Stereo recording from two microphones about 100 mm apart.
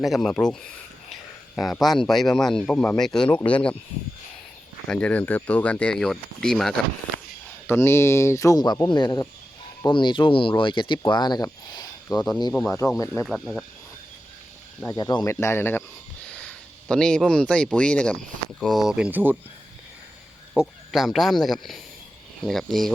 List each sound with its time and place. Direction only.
0.0 s speech: centre (ahead or behind)
1.1 s a sound: centre (ahead or behind)
1.8 s speech: centre (ahead or behind)
4.9 s speech: 15° left (ahead or behind)
7.7 s speech: 25° left (ahead or behind)
8.6 s speech: 45° left (ahead or behind)
12.8 s speech: 30° left (ahead or behind)
13.2 s speech: centre (ahead or behind)
14.8 s speech: 40° left (ahead or behind)
15.3 s speech: 30° left (ahead or behind)
16.3 s a sound: 10° left (ahead or behind)
17.7 s speech: 10° left (ahead or behind)
18.6 s speech: centre (ahead or behind); by 19.4 s 20° right (ahead or behind)
20.5 s speech: centre (ahead or behind)